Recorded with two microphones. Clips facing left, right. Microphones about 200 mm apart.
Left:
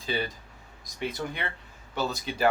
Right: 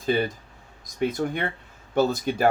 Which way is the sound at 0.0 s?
50° right (ahead or behind).